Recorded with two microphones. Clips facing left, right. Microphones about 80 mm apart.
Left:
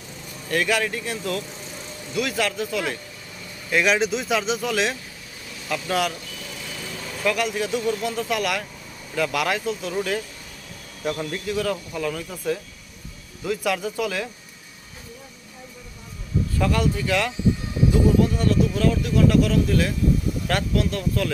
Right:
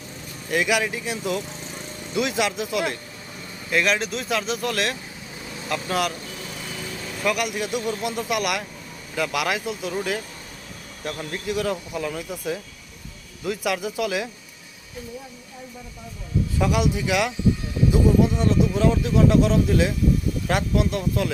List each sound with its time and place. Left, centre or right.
0.5 s speech: centre
7.3 s speech: centre
16.6 s speech: centre